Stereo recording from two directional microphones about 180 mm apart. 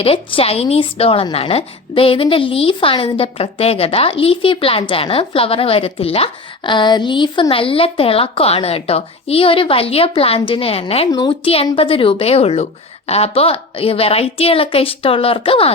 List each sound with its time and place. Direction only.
0.0 s a woman's voice: 30° left (ahead or behind)